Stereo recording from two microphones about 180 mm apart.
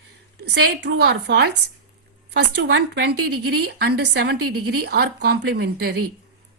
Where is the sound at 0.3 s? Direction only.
70° right (ahead or behind).